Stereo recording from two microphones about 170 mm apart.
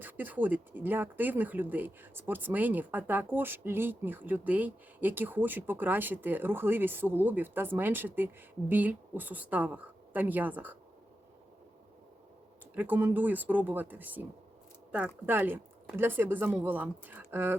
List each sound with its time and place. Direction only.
0.0 s speech: 10° right (ahead or behind)
12.7 s speech: 10° right (ahead or behind)